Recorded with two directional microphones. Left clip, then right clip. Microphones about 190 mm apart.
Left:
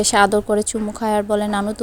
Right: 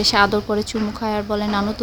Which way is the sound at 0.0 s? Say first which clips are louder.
Left 1 dB; 35° left (ahead or behind).